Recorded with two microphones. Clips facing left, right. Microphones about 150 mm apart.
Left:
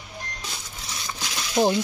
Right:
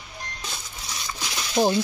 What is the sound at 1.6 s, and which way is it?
Speech, 5° left (ahead or behind).